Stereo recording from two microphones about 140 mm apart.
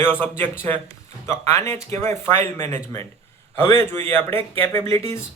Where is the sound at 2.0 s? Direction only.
15° left (ahead or behind).